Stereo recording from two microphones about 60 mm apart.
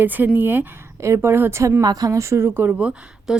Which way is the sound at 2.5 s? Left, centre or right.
Right.